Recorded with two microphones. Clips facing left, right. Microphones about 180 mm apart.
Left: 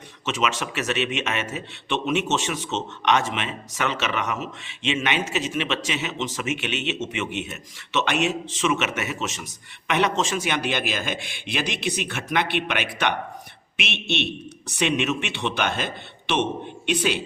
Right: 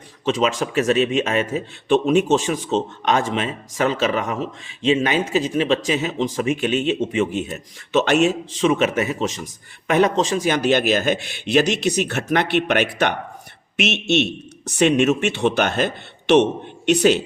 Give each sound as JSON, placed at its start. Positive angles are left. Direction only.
{"t": 0.3, "sound": "a man's voice", "side_deg": -35}
{"t": 11.2, "sound": "a man's voice", "side_deg": 50}
{"t": 12.0, "sound": "speech", "side_deg": -50}
{"t": 13.9, "sound": "a man's voice", "side_deg": 55}
{"t": 14.8, "sound": "a man's voice", "side_deg": -45}
{"t": 15.4, "sound": "speech", "side_deg": -55}
{"t": 16.9, "sound": "speech", "side_deg": -45}